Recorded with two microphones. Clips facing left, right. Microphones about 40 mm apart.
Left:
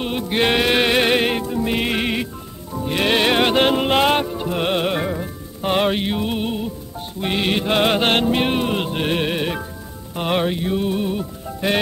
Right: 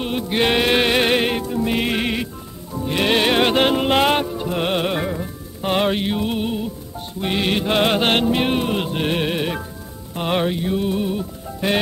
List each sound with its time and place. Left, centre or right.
0.0 s music: centre